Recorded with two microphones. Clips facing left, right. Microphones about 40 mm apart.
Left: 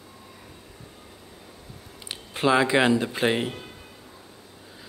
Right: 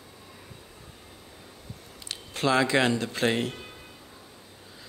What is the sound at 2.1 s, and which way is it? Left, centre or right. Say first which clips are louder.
Speech: left 3 dB; centre.